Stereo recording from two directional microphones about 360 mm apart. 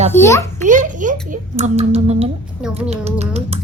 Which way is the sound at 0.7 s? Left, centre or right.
Right.